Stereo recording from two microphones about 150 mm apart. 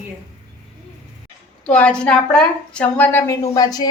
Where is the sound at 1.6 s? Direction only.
10° left (ahead or behind).